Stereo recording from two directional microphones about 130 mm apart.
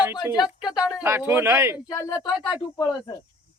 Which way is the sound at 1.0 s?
20° right (ahead or behind).